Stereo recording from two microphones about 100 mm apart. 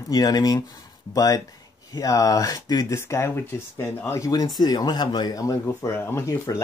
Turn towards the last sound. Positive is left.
turn(degrees=30)  # may be behind; listen again after turning